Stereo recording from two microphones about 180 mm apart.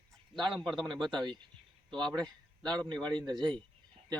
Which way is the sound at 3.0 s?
25° right (ahead or behind).